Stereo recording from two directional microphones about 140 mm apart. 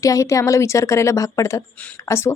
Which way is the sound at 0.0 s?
25° left (ahead or behind).